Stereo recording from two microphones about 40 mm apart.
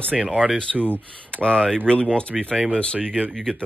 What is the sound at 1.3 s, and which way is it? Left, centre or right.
Speech, left.